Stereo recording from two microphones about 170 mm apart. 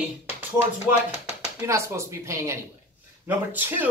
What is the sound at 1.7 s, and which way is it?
Speech, 15° right (ahead or behind).